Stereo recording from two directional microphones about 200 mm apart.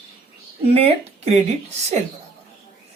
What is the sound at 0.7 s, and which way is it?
Speech, 30° right (ahead or behind).